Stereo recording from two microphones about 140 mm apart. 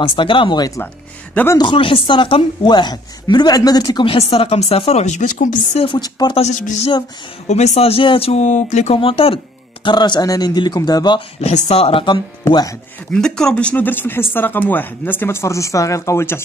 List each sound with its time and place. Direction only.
0.0 s a woman's voice: 35° left (ahead or behind)
1.3 s speech: 15° left (ahead or behind)
1.6 s a woman's voice: 35° left (ahead or behind); by 5.9 s 60° left (ahead or behind)
5.9 s a man's voice: 30° left (ahead or behind)
6.3 s a sound: 55° left (ahead or behind)
7.4 s a man's voice: 55° left (ahead or behind); by 11.2 s 30° left (ahead or behind)
11.4 s speech: 50° left (ahead or behind)
12.4 s a man's voice: 25° left (ahead or behind)
13.1 s speech: 5° left (ahead or behind)